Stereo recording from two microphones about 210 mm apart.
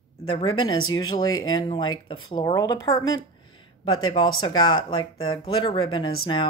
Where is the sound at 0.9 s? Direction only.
20° left (ahead or behind).